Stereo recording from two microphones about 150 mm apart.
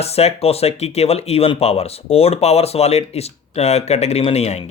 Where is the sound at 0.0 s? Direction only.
45° left (ahead or behind).